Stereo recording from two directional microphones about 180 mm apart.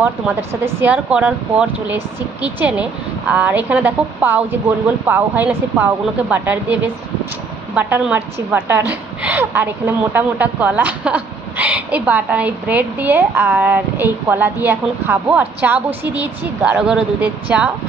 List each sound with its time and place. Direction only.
0.0 s a woman's voice: 15° right (ahead or behind)